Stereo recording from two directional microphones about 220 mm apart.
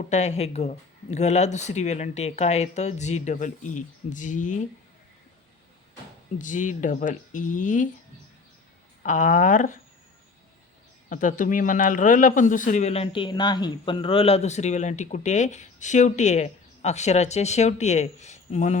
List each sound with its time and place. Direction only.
0.1 s speech: 30° left (ahead or behind)
6.4 s speech: 35° left (ahead or behind)
9.0 s speech: 35° left (ahead or behind)
11.1 s speech: 35° left (ahead or behind)